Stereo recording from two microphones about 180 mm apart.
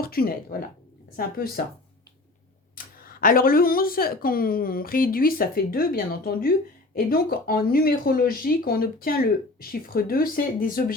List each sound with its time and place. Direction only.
0.0 s speech: 55° left (ahead or behind)
2.7 s speech: 55° left (ahead or behind)